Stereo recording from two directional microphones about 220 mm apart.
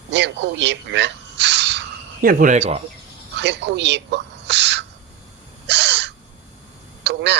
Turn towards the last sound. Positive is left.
turn(degrees=-50)  # may be behind; listen again after turning